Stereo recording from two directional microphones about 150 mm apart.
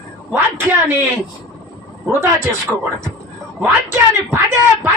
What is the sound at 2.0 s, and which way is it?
Speech, 15° right (ahead or behind).